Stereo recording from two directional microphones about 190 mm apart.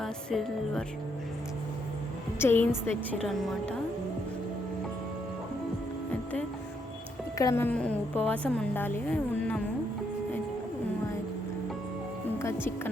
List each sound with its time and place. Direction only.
0.0 s music: centre (ahead or behind)
2.4 s a woman's voice: 10° left (ahead or behind)
7.3 s a woman's voice: 15° left (ahead or behind)